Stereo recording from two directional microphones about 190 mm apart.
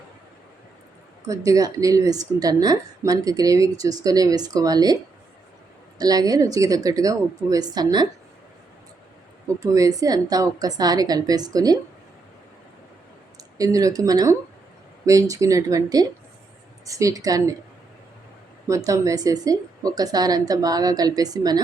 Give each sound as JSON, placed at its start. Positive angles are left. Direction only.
{"t": 1.5, "sound": "a woman's voice", "side_deg": -20}
{"t": 6.0, "sound": "a woman's voice", "side_deg": -20}
{"t": 9.6, "sound": "a woman's voice", "side_deg": -15}
{"t": 13.3, "sound": "speech", "side_deg": -20}
{"t": 18.7, "sound": "a woman's voice", "side_deg": -15}